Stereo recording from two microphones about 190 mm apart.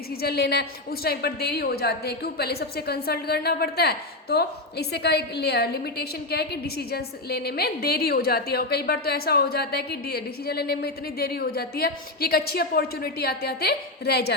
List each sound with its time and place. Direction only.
0.2 s a woman's voice: 55° left (ahead or behind)